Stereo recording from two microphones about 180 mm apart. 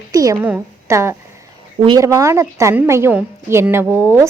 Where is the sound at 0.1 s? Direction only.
20° right (ahead or behind).